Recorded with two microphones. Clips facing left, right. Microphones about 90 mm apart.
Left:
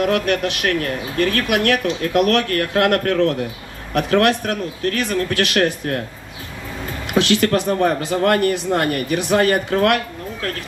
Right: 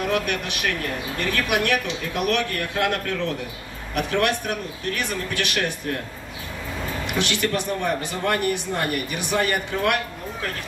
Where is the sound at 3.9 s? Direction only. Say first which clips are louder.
Left 7 dB; 50° left (ahead or behind).